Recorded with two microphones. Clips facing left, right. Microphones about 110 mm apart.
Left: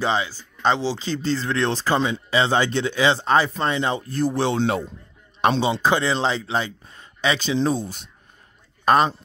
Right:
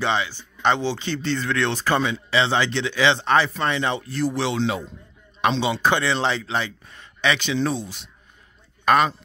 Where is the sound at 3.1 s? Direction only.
30° left (ahead or behind).